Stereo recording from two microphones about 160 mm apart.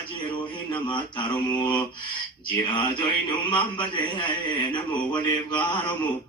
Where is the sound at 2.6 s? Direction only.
30° left (ahead or behind).